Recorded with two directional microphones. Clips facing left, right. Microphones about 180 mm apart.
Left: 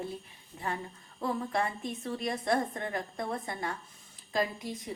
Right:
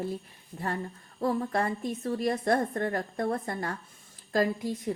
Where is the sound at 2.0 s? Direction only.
40° right (ahead or behind).